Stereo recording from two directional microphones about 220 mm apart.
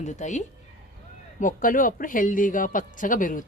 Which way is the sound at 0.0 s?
30° left (ahead or behind).